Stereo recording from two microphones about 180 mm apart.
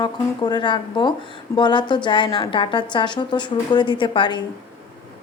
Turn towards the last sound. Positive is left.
turn(degrees=25)  # may be behind; listen again after turning